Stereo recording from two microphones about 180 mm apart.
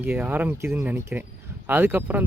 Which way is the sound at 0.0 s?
10° right (ahead or behind).